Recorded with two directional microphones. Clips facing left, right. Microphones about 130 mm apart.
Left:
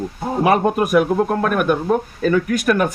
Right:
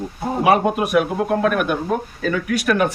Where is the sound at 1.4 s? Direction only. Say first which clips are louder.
Left 1 dB; 45° left (ahead or behind).